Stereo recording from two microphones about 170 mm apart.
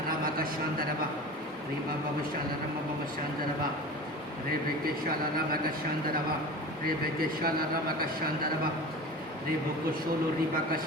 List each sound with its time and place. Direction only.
6.8 s speech: 60° right (ahead or behind)